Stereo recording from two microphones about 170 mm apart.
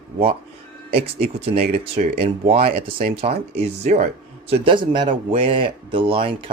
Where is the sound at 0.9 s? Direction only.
35° right (ahead or behind).